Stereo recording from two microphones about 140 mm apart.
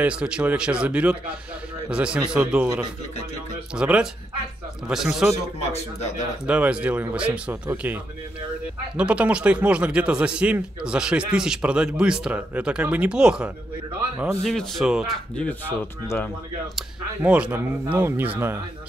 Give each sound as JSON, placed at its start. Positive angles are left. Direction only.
{"t": 0.0, "sound": "speech", "side_deg": -10}
{"t": 3.7, "sound": "speech", "side_deg": -5}
{"t": 5.3, "sound": "a man's voice", "side_deg": 50}
{"t": 6.4, "sound": "speech", "side_deg": -10}
{"t": 15.3, "sound": "speech", "side_deg": 10}
{"t": 17.2, "sound": "speech", "side_deg": -10}